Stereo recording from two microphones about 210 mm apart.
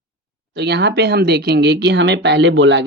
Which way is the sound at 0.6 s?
50° right (ahead or behind).